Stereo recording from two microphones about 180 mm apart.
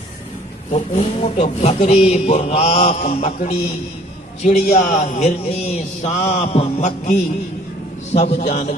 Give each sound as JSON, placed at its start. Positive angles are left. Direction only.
{"t": 0.7, "sound": "a man's voice", "side_deg": 40}